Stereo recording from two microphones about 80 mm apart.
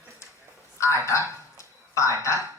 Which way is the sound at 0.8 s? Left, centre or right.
Left.